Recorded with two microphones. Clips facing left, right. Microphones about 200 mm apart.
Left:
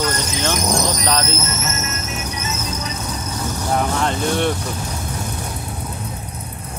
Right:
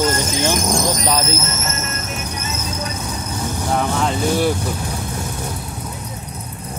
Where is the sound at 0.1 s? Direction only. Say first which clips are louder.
Right 3 dB; 50° right (ahead or behind).